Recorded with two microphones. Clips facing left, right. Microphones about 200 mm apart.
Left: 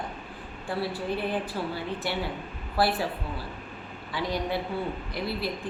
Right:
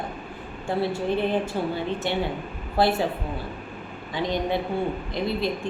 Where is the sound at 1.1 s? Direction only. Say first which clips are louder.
Right 5 dB; 25° right (ahead or behind).